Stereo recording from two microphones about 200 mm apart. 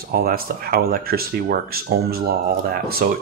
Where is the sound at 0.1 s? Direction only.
50° right (ahead or behind).